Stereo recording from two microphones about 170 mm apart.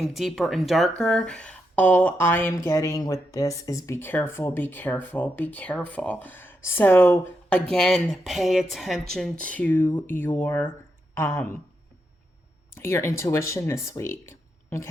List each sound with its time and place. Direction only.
0.0 s speech: centre (ahead or behind)
7.7 s speech: 5° left (ahead or behind)
12.7 s speech: 15° left (ahead or behind)